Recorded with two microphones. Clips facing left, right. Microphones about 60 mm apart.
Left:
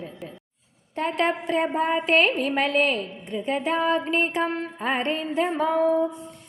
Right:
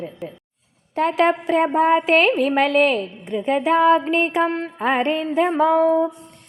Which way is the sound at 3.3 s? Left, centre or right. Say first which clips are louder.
Right 7 dB; right.